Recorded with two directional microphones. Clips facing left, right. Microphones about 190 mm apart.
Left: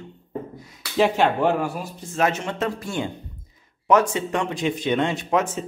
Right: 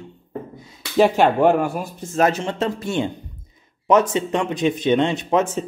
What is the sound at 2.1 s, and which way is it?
Speech, 35° right (ahead or behind).